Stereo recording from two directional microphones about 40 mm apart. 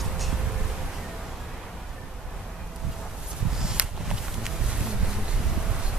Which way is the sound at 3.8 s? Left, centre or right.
Right.